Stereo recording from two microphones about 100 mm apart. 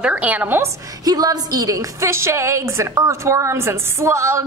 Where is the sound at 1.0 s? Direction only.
40° right (ahead or behind).